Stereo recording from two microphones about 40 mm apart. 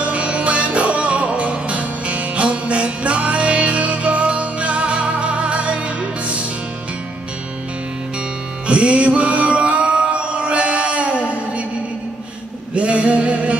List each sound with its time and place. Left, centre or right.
0.0 s music: right
8.6 s music: right
12.7 s male singing: right